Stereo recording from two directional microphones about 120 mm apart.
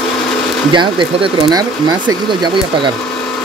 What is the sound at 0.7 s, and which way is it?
Speech, 40° right (ahead or behind).